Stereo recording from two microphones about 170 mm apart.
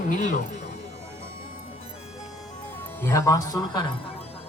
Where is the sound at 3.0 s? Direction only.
15° left (ahead or behind).